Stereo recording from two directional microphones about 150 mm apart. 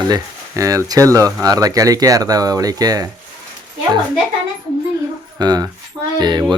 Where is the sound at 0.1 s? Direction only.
25° right (ahead or behind).